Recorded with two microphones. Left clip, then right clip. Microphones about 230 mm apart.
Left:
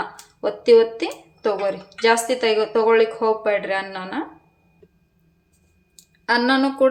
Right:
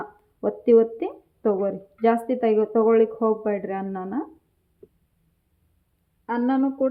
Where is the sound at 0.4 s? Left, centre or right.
Centre.